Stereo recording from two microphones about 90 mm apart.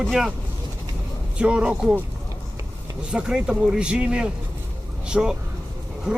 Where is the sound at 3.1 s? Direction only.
10° right (ahead or behind).